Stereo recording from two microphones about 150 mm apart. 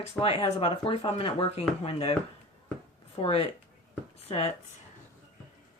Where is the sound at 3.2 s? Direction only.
45° left (ahead or behind).